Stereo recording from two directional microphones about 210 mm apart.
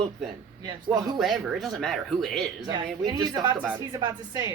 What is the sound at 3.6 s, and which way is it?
Speech, 5° right (ahead or behind).